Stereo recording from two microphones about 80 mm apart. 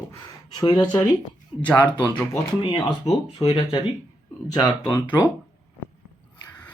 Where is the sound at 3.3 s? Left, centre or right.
Left.